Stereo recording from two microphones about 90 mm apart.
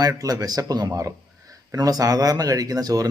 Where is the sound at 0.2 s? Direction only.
40° right (ahead or behind).